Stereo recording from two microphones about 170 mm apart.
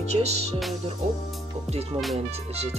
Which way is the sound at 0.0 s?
40° right (ahead or behind).